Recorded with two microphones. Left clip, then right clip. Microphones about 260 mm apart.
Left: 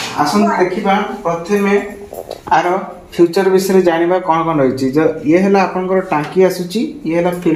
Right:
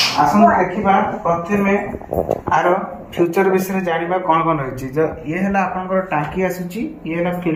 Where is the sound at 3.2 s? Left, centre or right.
Left.